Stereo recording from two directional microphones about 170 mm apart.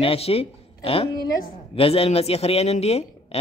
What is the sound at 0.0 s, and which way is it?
Speech, 35° left (ahead or behind).